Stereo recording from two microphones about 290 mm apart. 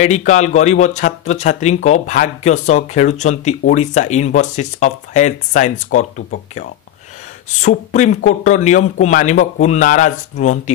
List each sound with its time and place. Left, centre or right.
0.0 s speech: left